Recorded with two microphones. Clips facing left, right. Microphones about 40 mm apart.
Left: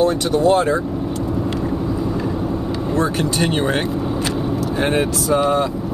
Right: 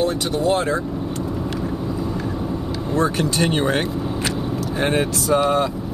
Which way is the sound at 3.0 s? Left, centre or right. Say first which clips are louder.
Even; centre.